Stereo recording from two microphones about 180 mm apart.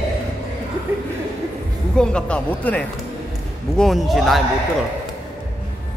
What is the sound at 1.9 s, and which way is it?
A man's voice, 5° left (ahead or behind).